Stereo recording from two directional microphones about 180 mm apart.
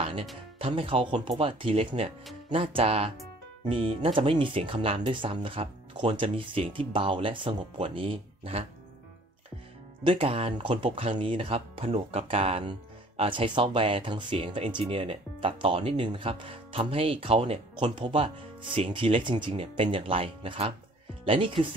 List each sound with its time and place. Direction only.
0.0 s music: 30° right (ahead or behind)
0.6 s speech: 30° right (ahead or behind)
10.0 s speech: 30° right (ahead or behind)